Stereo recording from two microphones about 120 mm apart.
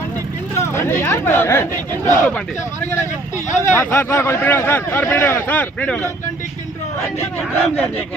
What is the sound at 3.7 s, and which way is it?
Speech, 20° left (ahead or behind).